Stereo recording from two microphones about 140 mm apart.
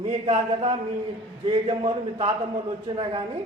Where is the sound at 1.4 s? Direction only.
40° right (ahead or behind).